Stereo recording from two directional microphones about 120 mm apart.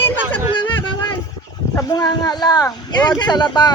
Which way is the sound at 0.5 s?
40° left (ahead or behind).